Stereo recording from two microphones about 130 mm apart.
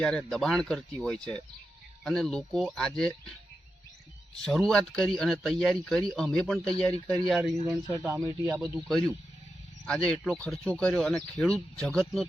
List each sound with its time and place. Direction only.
0.0 s speech: 5° left (ahead or behind)
4.4 s speech: 5° left (ahead or behind)
7.9 s speech: 25° right (ahead or behind)
8.5 s speech: 5° right (ahead or behind)
9.8 s speech: 10° left (ahead or behind)